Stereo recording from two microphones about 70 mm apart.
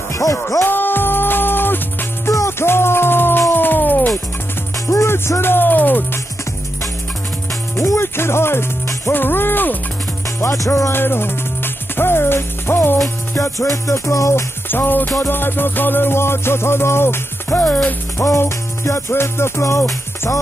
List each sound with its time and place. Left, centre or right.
0.1 s music: left
0.7 s music: left
4.9 s music: left
7.7 s music: left
10.4 s music: left
10.9 s music: left
13.3 s music: left
14.3 s music: left